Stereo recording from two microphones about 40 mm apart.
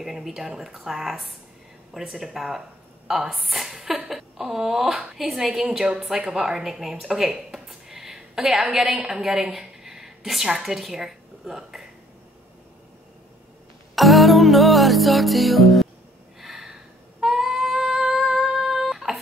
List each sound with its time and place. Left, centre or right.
0.0 s a woman's voice: centre
7.1 s a sound: centre
9.0 s a woman's voice: centre
13.9 s music: centre
16.3 s a sound: centre
17.2 s female singing: centre